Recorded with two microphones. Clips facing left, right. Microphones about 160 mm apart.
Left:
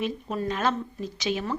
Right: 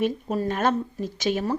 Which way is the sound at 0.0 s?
45° right (ahead or behind).